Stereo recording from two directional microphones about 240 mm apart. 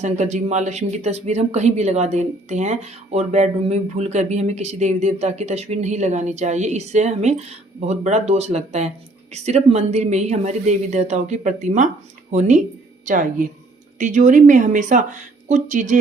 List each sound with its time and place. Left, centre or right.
0.0 s speech: right